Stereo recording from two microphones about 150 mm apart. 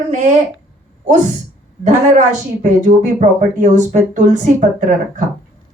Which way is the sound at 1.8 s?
55° right (ahead or behind).